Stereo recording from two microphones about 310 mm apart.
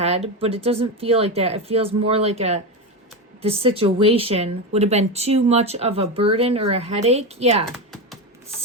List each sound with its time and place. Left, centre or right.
0.0 s speech: right